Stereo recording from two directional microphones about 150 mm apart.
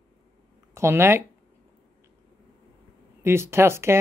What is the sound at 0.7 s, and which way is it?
Speech, 15° right (ahead or behind).